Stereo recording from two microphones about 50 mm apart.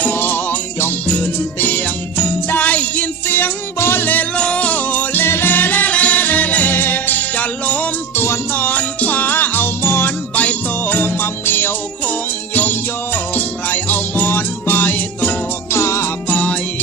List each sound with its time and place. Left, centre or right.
0.0 s music: left
2.2 s jingle bell: left
2.6 s music: left
4.4 s music: left
5.2 s music: left
6.7 s music: left
8.1 s music: left
10.3 s music: left
15.7 s music: left
16.3 s music: left